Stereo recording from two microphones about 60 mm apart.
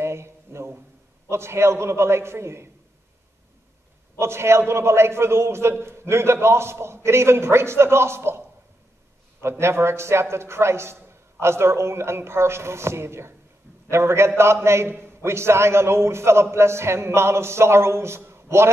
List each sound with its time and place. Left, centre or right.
0.0 s a sound: right
1.3 s a man's voice: right
4.2 s a man's voice: right